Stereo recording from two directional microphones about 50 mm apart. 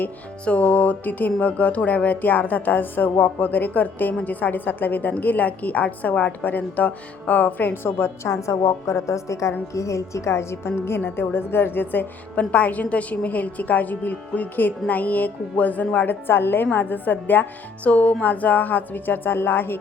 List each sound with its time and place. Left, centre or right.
0.4 s music: left
7.7 s a woman's voice: left
12.4 s music: left
17.8 s a woman's voice: left